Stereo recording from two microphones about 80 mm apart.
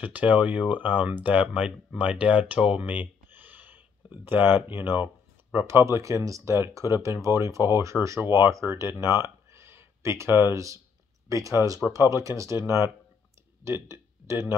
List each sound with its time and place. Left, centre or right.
0.0 s speech: centre; by 12.5 s right
13.7 s speech: right